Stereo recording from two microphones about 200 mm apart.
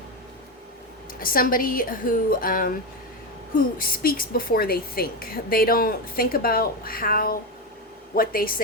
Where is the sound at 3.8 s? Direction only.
45° left (ahead or behind).